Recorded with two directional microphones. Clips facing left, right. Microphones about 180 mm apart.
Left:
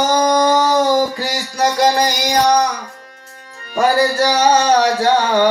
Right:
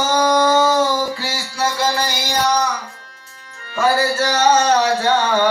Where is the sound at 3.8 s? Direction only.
15° left (ahead or behind).